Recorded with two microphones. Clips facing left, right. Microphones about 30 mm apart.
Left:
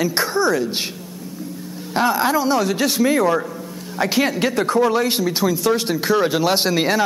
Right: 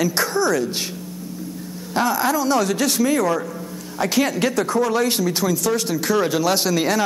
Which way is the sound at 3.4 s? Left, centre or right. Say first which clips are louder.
Left 1 dB; centre.